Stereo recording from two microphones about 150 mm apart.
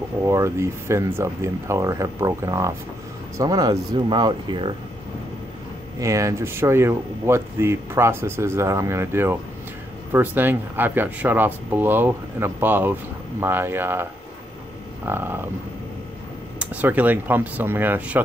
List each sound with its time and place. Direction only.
0.2 s speech: 20° right (ahead or behind)
5.9 s speech: 20° right (ahead or behind)
15.0 s speech: 15° right (ahead or behind)
16.5 s speech: 10° right (ahead or behind)